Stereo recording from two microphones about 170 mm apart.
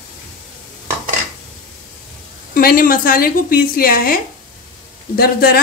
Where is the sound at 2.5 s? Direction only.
60° left (ahead or behind).